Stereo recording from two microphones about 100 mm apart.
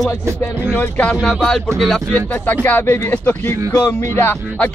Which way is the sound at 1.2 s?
5° left (ahead or behind).